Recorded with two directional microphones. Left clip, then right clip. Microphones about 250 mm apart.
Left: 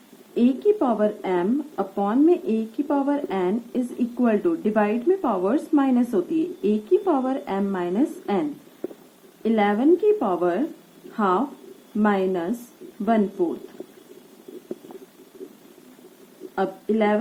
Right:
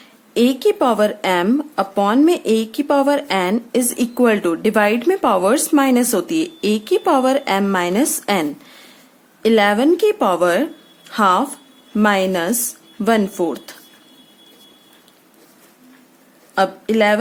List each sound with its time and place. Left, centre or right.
0.3 s speech: right
16.6 s speech: right